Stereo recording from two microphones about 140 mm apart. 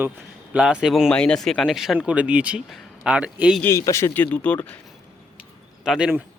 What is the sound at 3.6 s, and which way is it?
Speech, 20° left (ahead or behind).